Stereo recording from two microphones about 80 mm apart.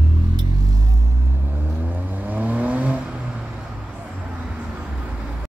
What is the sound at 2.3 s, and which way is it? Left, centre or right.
Vehicle, centre.